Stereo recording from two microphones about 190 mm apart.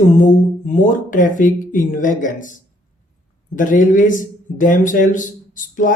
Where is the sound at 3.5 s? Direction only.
45° left (ahead or behind).